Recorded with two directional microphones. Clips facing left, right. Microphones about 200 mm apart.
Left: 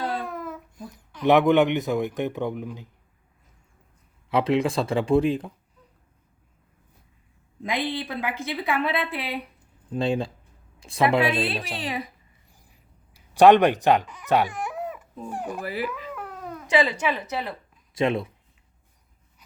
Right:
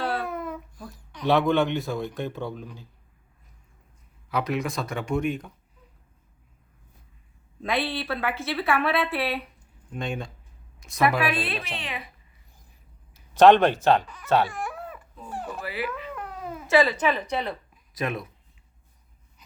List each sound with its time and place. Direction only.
0.3 s babbling: centre (ahead or behind)
0.8 s a sound: 20° left (ahead or behind)
1.2 s a man's voice: 20° left (ahead or behind)
4.3 s a man's voice: 25° left (ahead or behind)
7.6 s a woman's voice: 15° left (ahead or behind)
9.9 s a woman's voice: 30° left (ahead or behind)
13.1 s a woman's voice: 15° left (ahead or behind)
15.9 s cat: 5° left (ahead or behind)
16.6 s a woman's voice: 15° left (ahead or behind)
17.9 s a man's voice: 25° left (ahead or behind)